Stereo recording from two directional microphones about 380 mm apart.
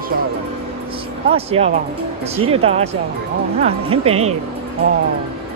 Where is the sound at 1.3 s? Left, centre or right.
Centre.